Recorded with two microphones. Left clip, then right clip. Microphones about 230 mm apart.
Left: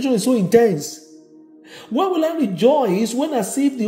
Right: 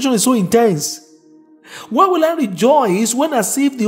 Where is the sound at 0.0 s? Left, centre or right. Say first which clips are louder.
Right 3 dB; right.